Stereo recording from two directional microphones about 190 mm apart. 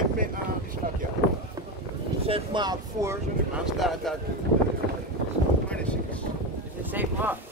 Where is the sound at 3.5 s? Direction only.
Centre (ahead or behind).